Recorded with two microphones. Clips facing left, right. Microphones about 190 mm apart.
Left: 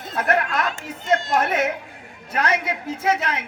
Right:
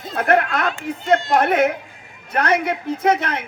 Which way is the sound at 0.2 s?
55° right (ahead or behind).